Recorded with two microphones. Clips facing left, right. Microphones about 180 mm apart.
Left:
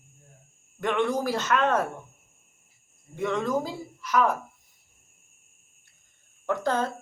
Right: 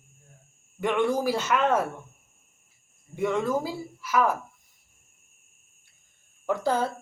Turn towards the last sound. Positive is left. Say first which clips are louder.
# right 1 dB
turn(degrees=-10)  # may be behind; listen again after turning